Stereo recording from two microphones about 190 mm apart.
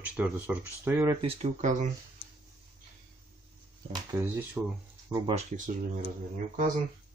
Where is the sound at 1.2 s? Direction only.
35° right (ahead or behind).